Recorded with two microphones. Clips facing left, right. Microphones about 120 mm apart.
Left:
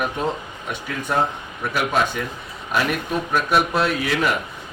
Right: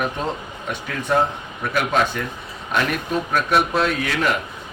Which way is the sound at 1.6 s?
5° left (ahead or behind).